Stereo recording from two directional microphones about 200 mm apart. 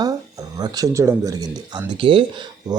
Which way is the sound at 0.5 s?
20° right (ahead or behind).